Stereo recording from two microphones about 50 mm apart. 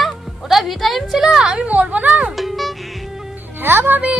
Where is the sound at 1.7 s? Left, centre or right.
Right.